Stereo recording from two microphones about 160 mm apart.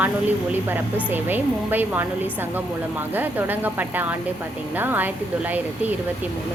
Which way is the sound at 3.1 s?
10° right (ahead or behind).